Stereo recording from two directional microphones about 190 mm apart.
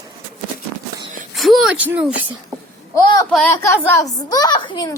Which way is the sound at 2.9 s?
15° left (ahead or behind).